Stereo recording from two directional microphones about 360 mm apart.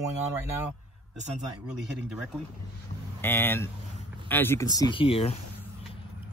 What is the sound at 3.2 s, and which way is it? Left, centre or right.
Speech, centre.